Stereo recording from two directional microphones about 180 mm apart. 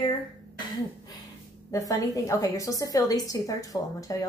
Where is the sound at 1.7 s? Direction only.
20° left (ahead or behind).